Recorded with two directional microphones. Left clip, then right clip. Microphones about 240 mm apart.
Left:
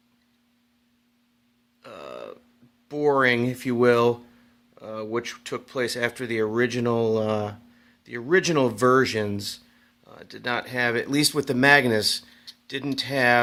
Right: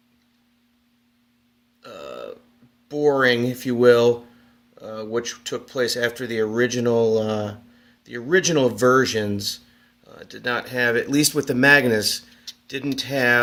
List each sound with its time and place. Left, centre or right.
1.8 s burping: left
2.9 s speech: left